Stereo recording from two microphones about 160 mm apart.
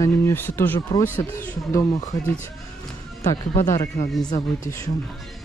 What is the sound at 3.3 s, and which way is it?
Speech, 25° left (ahead or behind).